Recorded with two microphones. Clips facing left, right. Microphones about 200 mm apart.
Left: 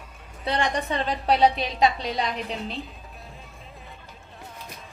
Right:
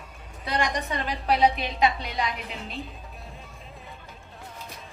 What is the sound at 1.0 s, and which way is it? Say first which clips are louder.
A woman's voice: left 2 dB; 30° left (ahead or behind).